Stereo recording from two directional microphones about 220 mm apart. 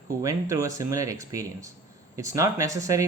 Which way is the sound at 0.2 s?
15° right (ahead or behind).